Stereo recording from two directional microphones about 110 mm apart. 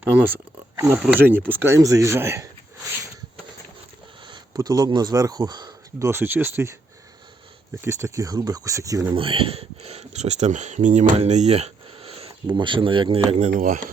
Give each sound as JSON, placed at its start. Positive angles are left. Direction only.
{"t": 0.0, "sound": "speech", "side_deg": -20}
{"t": 4.3, "sound": "a sound", "side_deg": -35}
{"t": 4.9, "sound": "speech", "side_deg": -40}
{"t": 6.1, "sound": "speech", "side_deg": -20}
{"t": 7.8, "sound": "speech", "side_deg": -25}
{"t": 9.1, "sound": "speech", "side_deg": -55}
{"t": 12.5, "sound": "speech", "side_deg": -45}